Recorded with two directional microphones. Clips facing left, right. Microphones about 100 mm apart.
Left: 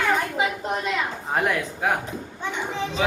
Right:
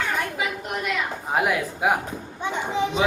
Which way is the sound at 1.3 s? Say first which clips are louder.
Right 2 dB; 5° right (ahead or behind).